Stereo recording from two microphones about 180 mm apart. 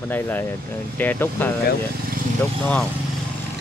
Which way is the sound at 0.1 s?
10° left (ahead or behind).